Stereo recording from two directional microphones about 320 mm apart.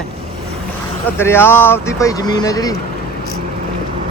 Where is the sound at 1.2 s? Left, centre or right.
Centre.